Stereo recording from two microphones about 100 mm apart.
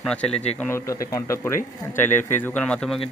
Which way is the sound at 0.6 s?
25° left (ahead or behind).